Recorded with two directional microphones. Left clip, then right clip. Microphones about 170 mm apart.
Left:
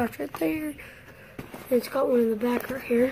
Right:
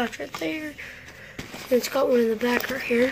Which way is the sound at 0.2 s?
30° left (ahead or behind).